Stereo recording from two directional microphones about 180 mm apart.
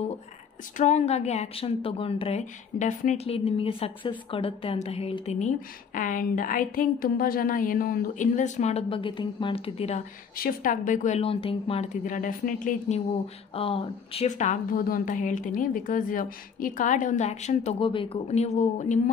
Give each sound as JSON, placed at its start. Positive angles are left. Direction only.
{"t": 0.7, "sound": "a woman's voice", "side_deg": 40}
{"t": 10.3, "sound": "a woman's voice", "side_deg": 50}
{"t": 13.6, "sound": "a woman's voice", "side_deg": 30}